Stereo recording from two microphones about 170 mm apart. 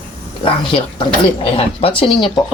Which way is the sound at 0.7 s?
30° left (ahead or behind).